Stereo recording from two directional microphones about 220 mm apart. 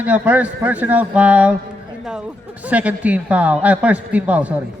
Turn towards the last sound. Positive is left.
turn(degrees=-5)  # may be behind; listen again after turning